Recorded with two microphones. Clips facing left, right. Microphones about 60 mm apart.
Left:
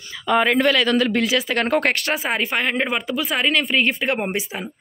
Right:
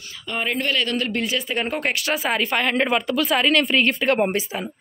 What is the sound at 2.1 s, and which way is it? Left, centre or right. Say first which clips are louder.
Speech: even; left.